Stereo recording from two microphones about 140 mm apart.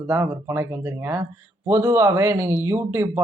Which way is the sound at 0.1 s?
20° right (ahead or behind).